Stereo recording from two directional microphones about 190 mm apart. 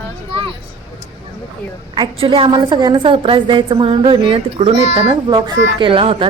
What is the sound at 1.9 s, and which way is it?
A woman's voice, 30° right (ahead or behind).